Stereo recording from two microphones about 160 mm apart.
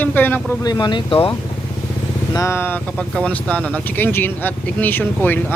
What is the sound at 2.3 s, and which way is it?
Speech, 15° left (ahead or behind).